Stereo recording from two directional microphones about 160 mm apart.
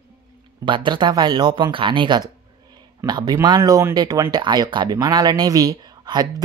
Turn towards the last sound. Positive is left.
turn(degrees=-25)  # may be behind; listen again after turning